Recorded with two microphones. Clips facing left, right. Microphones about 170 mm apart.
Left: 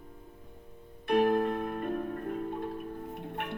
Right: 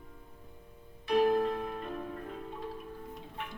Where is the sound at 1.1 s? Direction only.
55° left (ahead or behind).